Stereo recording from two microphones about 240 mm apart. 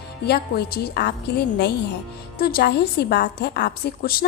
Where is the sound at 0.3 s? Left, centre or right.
Left.